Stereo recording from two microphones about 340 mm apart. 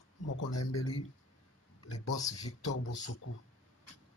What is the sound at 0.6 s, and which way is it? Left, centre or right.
Speech, left.